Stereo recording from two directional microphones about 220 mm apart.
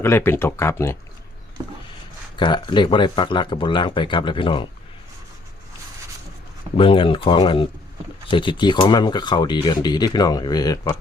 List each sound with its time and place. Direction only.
0.0 s speech: 10° left (ahead or behind)
2.3 s speech: 20° left (ahead or behind)
6.7 s speech: 25° left (ahead or behind)